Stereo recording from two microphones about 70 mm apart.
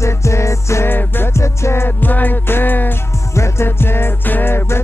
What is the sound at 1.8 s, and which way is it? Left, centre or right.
Music, left.